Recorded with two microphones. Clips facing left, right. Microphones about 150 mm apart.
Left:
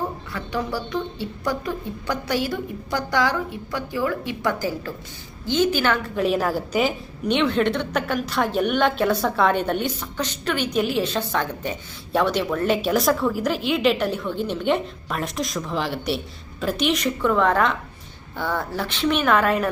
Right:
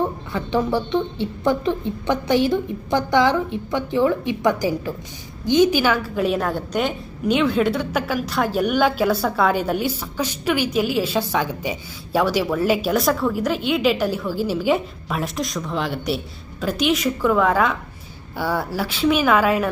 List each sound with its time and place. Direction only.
0.3 s a woman's voice: 25° right (ahead or behind); by 19.6 s centre (ahead or behind)